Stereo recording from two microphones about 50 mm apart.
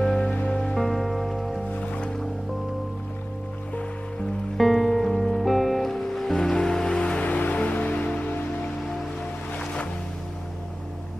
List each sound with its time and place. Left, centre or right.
0.5 s music: centre
1.8 s music: left
4.6 s music: centre; by 8.3 s left
9.6 s ocean: left